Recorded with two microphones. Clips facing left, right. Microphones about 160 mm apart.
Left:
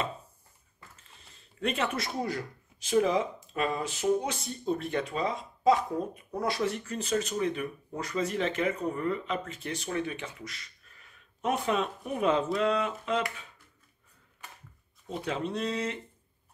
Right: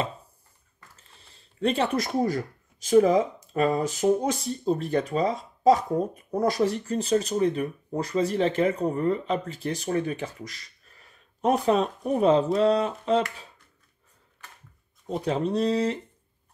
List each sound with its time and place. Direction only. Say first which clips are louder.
1.3 s speech: right 7 dB; 30° right (ahead or behind)
15.0 s speech: right 6 dB; 35° right (ahead or behind)